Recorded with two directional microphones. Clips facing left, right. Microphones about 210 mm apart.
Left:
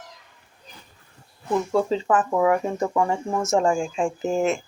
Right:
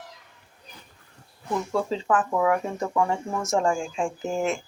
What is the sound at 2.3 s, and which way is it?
Speech, 15° left (ahead or behind).